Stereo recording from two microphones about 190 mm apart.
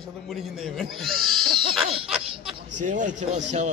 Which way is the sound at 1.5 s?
30° right (ahead or behind).